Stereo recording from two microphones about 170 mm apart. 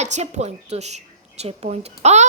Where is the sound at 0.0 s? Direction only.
40° right (ahead or behind).